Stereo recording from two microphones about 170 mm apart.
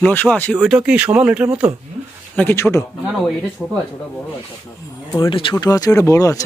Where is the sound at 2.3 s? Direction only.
15° left (ahead or behind).